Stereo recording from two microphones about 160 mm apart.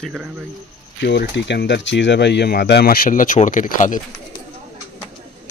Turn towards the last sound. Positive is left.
turn(degrees=55)  # may be behind; listen again after turning